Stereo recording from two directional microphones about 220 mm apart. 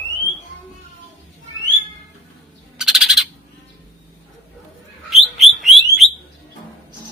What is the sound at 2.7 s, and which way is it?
Owl, centre (ahead or behind).